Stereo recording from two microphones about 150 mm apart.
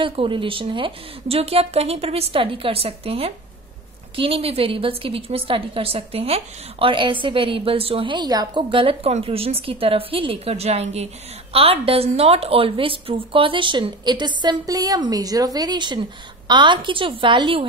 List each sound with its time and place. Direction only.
0.0 s a woman's voice: 35° right (ahead or behind)